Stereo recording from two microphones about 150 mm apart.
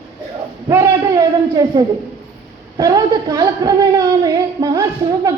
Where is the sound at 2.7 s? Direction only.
25° right (ahead or behind).